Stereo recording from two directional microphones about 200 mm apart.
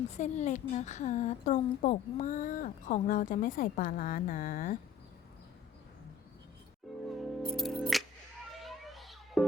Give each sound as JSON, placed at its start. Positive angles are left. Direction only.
{"t": 0.2, "sound": "a woman's voice", "side_deg": 35}
{"t": 7.1, "sound": "music", "side_deg": 0}